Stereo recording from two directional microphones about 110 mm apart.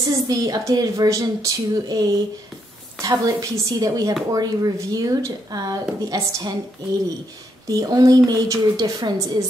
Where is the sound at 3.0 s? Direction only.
35° right (ahead or behind).